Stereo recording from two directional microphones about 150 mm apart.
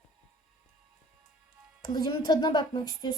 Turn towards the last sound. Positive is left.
turn(degrees=30)  # may be behind; listen again after turning